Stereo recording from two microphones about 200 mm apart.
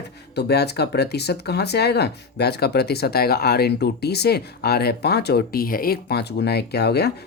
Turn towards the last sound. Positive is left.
turn(degrees=55)  # may be behind; listen again after turning